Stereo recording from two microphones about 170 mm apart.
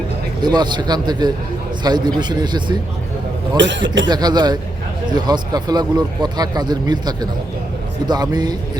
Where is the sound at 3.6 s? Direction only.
90° right.